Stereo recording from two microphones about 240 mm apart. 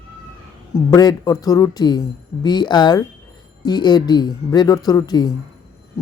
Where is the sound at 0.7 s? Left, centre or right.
Centre.